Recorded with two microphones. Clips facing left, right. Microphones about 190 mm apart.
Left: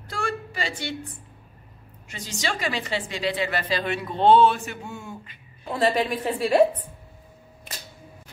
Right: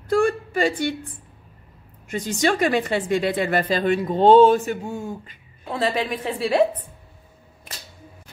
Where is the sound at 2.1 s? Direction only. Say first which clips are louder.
Right 9 dB; 55° right (ahead or behind).